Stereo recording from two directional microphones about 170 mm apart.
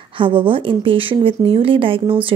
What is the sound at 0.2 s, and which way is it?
Speech, 30° right (ahead or behind).